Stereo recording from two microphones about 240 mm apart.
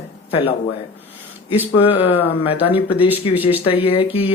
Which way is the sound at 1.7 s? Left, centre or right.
Left.